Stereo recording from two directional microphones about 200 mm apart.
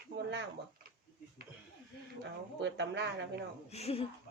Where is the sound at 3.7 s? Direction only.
30° left (ahead or behind).